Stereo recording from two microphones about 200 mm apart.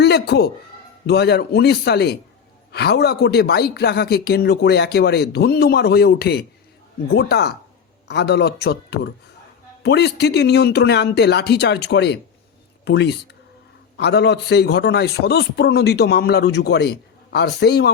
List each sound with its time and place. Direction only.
0.0 s a man's voice: 55° left (ahead or behind)